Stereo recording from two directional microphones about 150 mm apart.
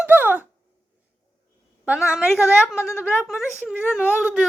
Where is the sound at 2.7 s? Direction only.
20° left (ahead or behind).